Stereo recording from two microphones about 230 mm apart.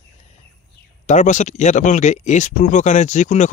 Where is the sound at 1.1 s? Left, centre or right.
Left.